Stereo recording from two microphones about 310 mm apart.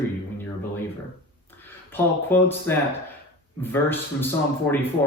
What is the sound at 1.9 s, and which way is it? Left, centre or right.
Speech, centre.